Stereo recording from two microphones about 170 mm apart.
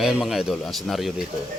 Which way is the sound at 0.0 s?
Centre (ahead or behind).